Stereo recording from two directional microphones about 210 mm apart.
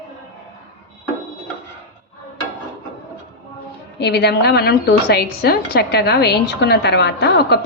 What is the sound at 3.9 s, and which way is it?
A woman's voice, 50° left (ahead or behind).